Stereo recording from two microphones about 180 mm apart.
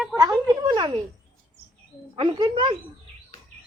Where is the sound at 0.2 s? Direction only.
20° right (ahead or behind).